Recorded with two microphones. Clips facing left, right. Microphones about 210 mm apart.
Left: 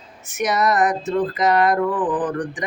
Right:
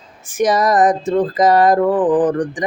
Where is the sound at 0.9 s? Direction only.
45° right (ahead or behind).